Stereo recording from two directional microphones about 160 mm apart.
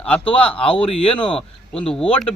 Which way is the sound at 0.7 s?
35° left (ahead or behind).